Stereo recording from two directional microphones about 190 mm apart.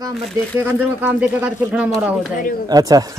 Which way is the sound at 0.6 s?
10° right (ahead or behind).